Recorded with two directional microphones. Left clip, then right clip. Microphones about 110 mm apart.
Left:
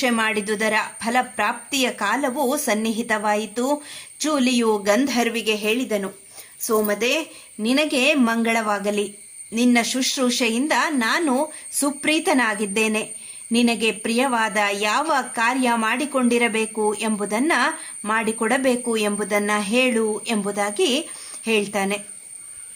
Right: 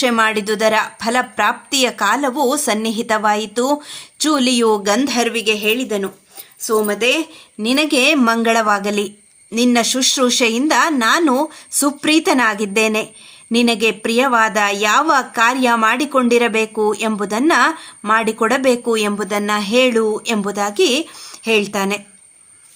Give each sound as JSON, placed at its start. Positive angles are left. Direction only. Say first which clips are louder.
{"t": 0.0, "sound": "a woman's voice", "louder": "right 6 dB", "side_deg": -40}